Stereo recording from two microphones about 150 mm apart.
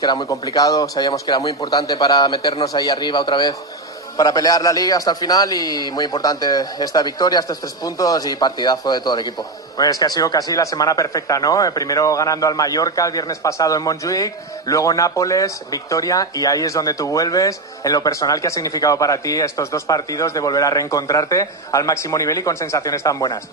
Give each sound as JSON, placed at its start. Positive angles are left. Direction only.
{"t": 0.0, "sound": "a man's voice", "side_deg": 25}